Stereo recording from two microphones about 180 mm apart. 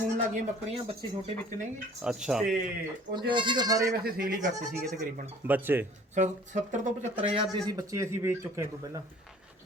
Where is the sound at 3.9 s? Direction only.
55° right (ahead or behind).